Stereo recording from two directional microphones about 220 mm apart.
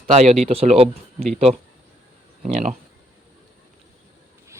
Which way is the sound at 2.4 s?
35° right (ahead or behind).